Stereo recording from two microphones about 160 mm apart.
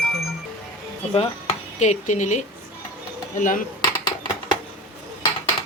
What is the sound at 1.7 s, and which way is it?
Speech, 50° left (ahead or behind).